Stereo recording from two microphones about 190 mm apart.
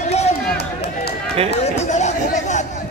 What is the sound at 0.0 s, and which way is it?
Run, 35° left (ahead or behind).